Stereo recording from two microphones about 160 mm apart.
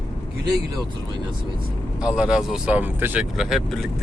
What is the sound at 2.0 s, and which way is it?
Speech, 5° right (ahead or behind).